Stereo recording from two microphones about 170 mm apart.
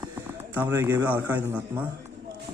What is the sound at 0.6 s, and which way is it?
Speech, 15° right (ahead or behind).